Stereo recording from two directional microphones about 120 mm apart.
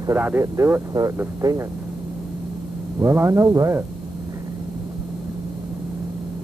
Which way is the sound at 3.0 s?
25° right (ahead or behind).